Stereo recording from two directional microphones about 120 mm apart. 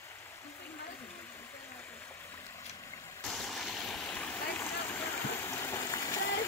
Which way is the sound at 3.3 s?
Centre (ahead or behind).